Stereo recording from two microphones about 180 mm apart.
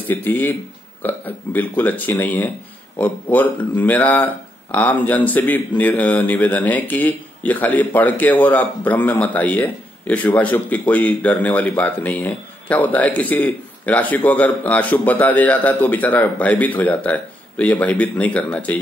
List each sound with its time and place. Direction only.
0.1 s speech: 10° left (ahead or behind)